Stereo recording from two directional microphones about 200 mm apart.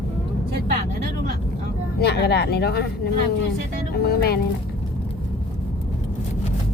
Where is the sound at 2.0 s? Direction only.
55° left (ahead or behind).